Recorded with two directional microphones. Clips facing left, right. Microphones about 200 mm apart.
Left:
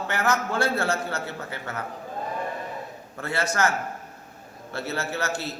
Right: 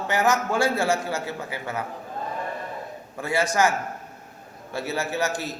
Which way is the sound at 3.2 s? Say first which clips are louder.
Right 3 dB; 15° right (ahead or behind).